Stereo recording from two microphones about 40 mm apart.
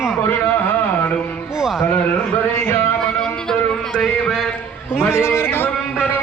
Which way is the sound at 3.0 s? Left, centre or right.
Centre.